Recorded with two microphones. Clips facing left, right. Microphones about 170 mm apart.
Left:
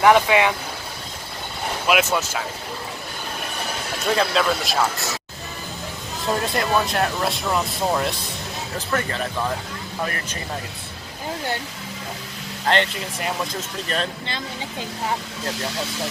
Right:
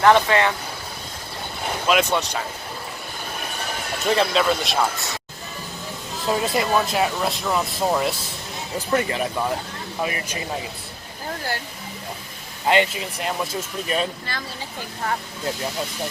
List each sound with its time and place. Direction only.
0.0 s speech: 10° left (ahead or behind)
1.9 s speech: 5° left (ahead or behind)
4.0 s speech: centre (ahead or behind)
6.2 s speech: 5° right (ahead or behind)
8.9 s speech: 15° right (ahead or behind)
12.6 s speech: 10° right (ahead or behind)
14.3 s speech: 20° left (ahead or behind)